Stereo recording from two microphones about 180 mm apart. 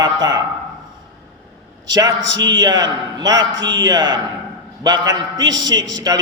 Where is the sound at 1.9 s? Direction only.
20° right (ahead or behind).